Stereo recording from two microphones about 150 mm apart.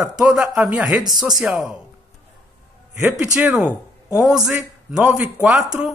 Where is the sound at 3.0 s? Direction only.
10° right (ahead or behind).